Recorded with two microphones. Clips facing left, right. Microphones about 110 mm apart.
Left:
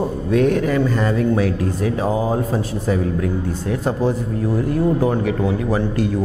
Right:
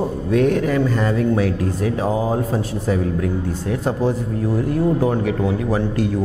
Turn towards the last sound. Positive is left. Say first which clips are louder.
# even
turn(degrees=20)  # may be behind; listen again after turning